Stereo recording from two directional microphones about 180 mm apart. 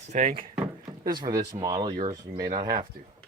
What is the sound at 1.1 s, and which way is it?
Speech, 25° right (ahead or behind).